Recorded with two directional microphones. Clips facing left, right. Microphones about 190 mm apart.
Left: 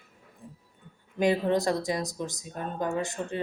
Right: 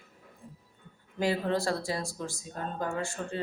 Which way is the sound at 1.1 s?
20° left (ahead or behind).